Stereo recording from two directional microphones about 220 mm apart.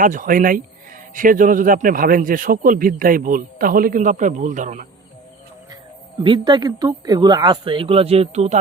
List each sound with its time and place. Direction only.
0.0 s a man's voice: 35° right (ahead or behind)
6.2 s speech: 20° right (ahead or behind)